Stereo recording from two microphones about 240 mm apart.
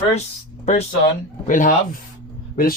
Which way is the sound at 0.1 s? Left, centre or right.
Left.